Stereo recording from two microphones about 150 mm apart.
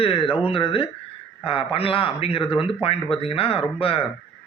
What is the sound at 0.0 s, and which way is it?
A man's voice, 35° left (ahead or behind).